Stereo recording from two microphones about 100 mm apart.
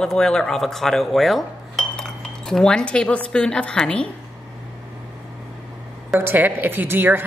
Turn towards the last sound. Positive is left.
turn(degrees=-20)  # may be behind; listen again after turning